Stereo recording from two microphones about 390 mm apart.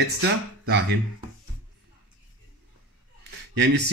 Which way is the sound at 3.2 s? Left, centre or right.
Right.